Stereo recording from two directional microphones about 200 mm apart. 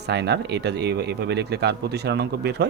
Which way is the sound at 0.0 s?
55° right (ahead or behind).